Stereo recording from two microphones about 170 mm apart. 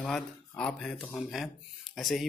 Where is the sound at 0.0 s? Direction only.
5° left (ahead or behind).